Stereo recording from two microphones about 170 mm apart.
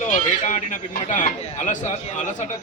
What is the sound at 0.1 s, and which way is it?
Speech, 50° left (ahead or behind).